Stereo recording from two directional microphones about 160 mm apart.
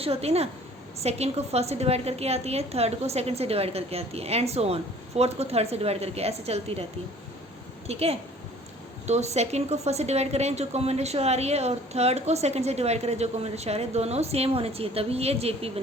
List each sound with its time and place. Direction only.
0.0 s a woman's voice: 40° right (ahead or behind)
7.9 s a woman's voice: 40° right (ahead or behind)